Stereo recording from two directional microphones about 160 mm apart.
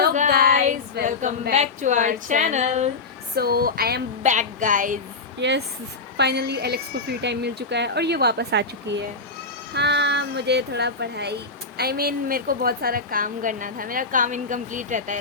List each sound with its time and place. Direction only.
0.3 s a sound: 70° right (ahead or behind)
1.5 s a woman's voice: 45° right (ahead or behind)
3.3 s speech: 70° right (ahead or behind)
4.2 s a woman's voice: 50° right (ahead or behind)
5.4 s a woman's voice: 90° right; by 15.2 s 50° right (ahead or behind)